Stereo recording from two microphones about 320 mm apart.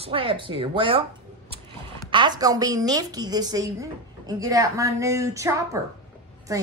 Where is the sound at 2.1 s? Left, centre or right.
Centre.